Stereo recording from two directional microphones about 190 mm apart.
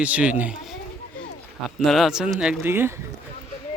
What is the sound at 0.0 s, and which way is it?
Speech, 5° right (ahead or behind).